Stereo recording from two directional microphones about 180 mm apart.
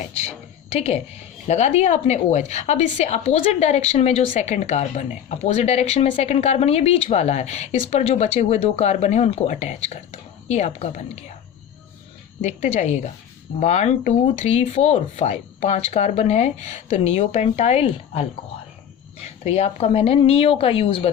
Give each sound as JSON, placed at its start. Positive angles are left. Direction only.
{"t": 0.7, "sound": "speech", "side_deg": 35}
{"t": 12.4, "sound": "speech", "side_deg": 40}